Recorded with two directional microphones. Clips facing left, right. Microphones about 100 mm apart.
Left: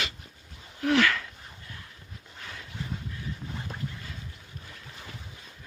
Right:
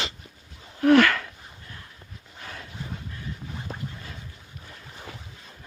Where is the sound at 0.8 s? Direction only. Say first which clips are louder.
Right 7 dB; 55° right (ahead or behind).